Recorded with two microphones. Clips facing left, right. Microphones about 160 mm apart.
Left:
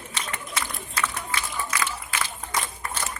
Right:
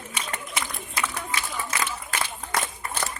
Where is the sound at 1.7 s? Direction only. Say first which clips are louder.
Left 1 dB; 25° right (ahead or behind).